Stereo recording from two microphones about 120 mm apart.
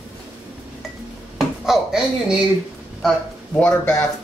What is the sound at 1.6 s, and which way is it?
Speech, 5° right (ahead or behind).